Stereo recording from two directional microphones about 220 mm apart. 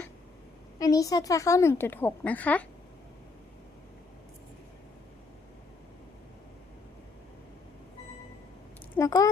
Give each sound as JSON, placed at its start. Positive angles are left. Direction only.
{"t": 0.8, "sound": "a woman's voice", "side_deg": 15}
{"t": 9.0, "sound": "speech", "side_deg": 15}